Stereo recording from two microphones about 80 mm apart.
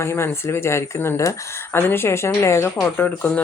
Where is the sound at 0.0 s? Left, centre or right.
Left.